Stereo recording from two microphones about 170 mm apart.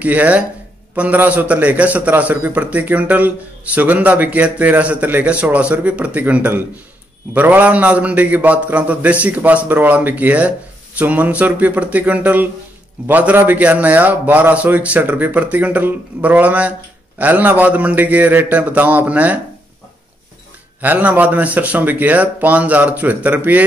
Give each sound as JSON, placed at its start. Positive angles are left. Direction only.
{"t": 0.0, "sound": "a man's voice", "side_deg": -10}
{"t": 20.8, "sound": "a man's voice", "side_deg": -10}